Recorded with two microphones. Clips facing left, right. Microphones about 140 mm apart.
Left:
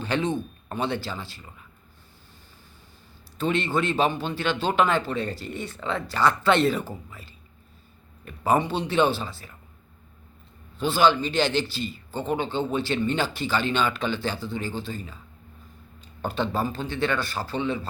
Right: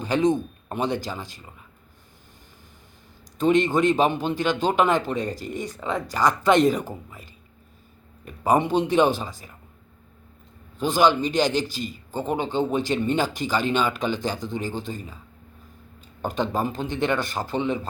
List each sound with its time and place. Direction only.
0.0 s speech: 15° right (ahead or behind)
3.3 s speech: 15° right (ahead or behind)
8.4 s speech: 15° right (ahead or behind)
10.8 s speech: 15° right (ahead or behind)
16.2 s speech: 15° right (ahead or behind)